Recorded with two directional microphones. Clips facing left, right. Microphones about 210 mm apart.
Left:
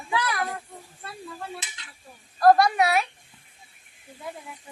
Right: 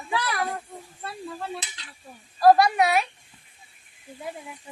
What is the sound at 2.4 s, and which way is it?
Speech, 5° right (ahead or behind).